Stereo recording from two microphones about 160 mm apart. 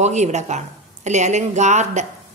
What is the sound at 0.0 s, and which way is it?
A woman's voice, 45° right (ahead or behind).